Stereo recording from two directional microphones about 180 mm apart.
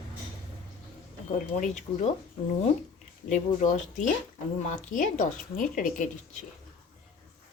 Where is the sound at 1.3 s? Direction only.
45° left (ahead or behind).